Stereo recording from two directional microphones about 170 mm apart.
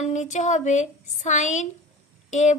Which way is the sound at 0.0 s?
45° left (ahead or behind).